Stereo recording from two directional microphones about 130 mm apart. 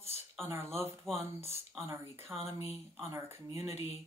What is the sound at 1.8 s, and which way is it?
Speech, 20° right (ahead or behind).